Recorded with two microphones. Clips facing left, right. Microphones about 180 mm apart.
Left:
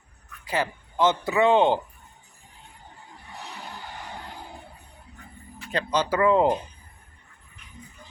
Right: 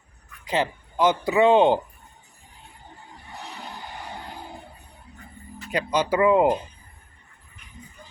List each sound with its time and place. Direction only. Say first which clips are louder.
0.4 s speech: right 3 dB; 20° right (ahead or behind)
5.7 s speech: right 2 dB; 15° right (ahead or behind)